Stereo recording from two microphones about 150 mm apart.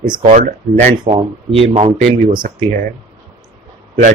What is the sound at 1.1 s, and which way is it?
Speech, 35° right (ahead or behind).